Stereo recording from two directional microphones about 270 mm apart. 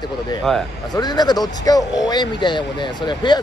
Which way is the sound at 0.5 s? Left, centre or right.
Centre.